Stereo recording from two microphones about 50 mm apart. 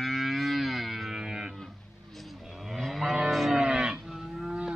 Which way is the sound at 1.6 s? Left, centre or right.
Centre.